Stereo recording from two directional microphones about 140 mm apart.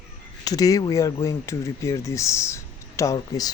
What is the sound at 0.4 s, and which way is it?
Speech, 25° left (ahead or behind).